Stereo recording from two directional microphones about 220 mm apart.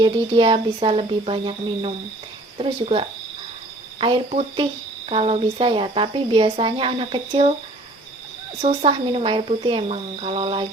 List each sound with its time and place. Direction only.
0.0 s speech: 20° right (ahead or behind)
8.6 s speech: 25° right (ahead or behind)